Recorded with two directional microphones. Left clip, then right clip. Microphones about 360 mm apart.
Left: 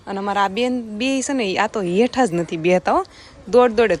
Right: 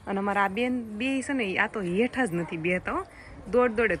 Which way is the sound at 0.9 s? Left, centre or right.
Left.